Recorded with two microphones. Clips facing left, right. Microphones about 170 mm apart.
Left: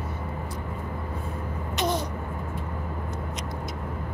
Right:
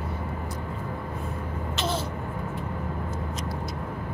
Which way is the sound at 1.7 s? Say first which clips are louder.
Left 3 dB; 15° left (ahead or behind).